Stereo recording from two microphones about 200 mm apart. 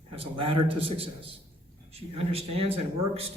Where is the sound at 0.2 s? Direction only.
25° right (ahead or behind).